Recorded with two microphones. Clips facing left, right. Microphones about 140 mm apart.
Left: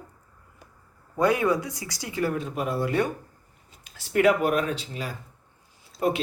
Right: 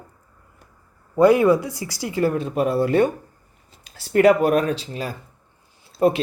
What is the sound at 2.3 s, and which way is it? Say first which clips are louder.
Speech: right 7 dB; 75° right (ahead or behind).